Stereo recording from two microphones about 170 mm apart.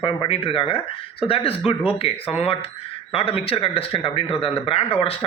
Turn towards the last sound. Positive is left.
turn(degrees=35)  # may be behind; listen again after turning